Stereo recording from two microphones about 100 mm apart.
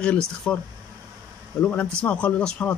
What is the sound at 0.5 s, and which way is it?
Speech, 15° left (ahead or behind).